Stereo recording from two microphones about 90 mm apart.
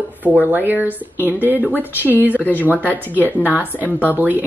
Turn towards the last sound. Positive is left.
turn(degrees=-20)  # may be behind; listen again after turning